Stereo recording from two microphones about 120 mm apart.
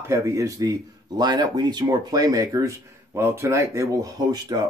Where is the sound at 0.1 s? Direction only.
25° right (ahead or behind).